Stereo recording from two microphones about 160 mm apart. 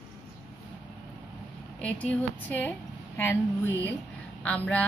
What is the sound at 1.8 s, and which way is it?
A woman's voice, 10° left (ahead or behind).